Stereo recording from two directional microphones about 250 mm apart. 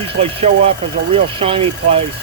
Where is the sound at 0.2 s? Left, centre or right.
Right.